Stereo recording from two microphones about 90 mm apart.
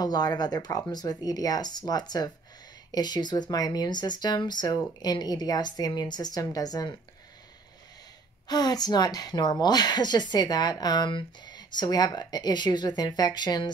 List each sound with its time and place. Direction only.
0.0 s a woman's voice: 50° left (ahead or behind)
8.5 s a woman's voice: 50° left (ahead or behind)